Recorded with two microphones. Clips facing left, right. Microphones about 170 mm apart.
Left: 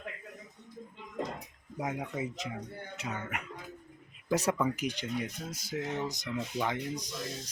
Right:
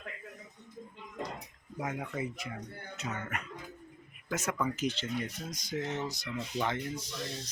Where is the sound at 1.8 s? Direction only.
15° left (ahead or behind).